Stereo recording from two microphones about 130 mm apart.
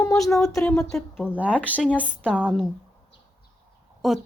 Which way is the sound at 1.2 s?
10° right (ahead or behind).